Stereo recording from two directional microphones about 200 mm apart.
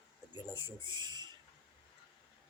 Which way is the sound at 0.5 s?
25° right (ahead or behind).